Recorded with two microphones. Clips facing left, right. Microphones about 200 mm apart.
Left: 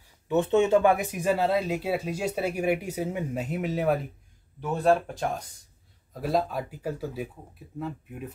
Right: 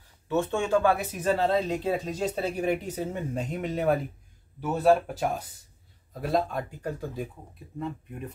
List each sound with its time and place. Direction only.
0.3 s speech: 20° left (ahead or behind); by 8.3 s 5° left (ahead or behind)